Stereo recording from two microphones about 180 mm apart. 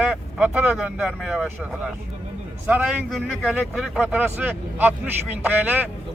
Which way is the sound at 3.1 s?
Centre (ahead or behind).